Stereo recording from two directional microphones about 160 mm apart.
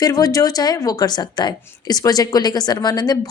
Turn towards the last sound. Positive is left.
turn(degrees=25)  # may be behind; listen again after turning